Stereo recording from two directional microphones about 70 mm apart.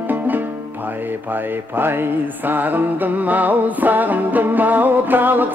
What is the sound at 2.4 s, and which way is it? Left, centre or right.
Music, right.